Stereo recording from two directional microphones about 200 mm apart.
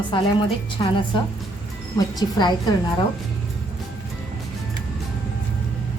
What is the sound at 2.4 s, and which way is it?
Speech, 20° left (ahead or behind).